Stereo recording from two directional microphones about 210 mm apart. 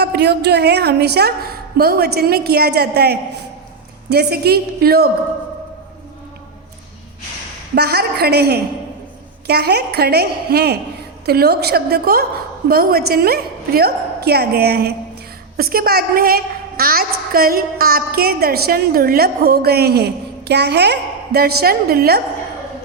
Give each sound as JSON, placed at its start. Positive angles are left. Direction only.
{"t": 0.0, "sound": "a woman's voice", "side_deg": -50}
{"t": 7.8, "sound": "a woman's voice", "side_deg": -50}